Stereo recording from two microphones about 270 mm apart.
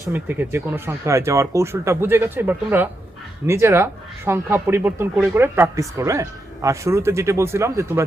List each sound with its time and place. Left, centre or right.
0.1 s speech: centre